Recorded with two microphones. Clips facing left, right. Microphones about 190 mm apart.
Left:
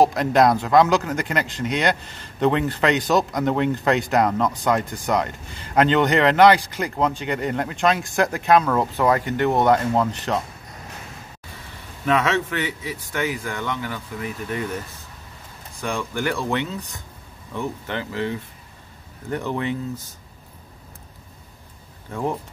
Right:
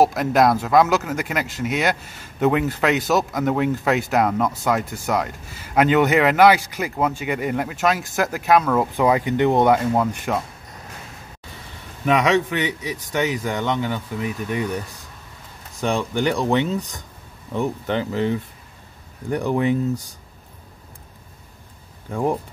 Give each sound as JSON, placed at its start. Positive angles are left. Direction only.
{"t": 0.0, "sound": "speech", "side_deg": -5}
{"t": 12.1, "sound": "a man's voice", "side_deg": -15}
{"t": 15.8, "sound": "a man's voice", "side_deg": -20}
{"t": 19.3, "sound": "a man's voice", "side_deg": -15}
{"t": 22.1, "sound": "a man's voice", "side_deg": -15}